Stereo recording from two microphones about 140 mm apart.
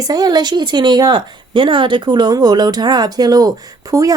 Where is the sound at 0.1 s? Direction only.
30° right (ahead or behind).